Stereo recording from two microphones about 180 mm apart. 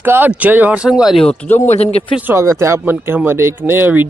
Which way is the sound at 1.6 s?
35° left (ahead or behind).